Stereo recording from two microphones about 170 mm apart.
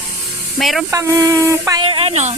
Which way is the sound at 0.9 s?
15° right (ahead or behind).